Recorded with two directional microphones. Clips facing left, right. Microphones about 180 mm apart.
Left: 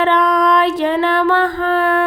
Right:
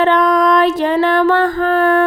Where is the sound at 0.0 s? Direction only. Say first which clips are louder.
Right 2 dB; 45° right (ahead or behind).